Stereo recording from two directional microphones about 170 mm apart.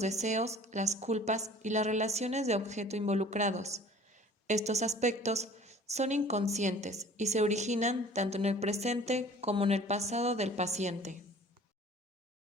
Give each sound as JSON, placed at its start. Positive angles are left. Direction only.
{"t": 0.0, "sound": "a woman's voice", "side_deg": -40}